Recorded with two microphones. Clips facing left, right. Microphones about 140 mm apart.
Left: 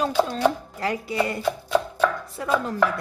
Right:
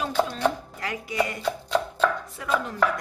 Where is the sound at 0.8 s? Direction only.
30° left (ahead or behind).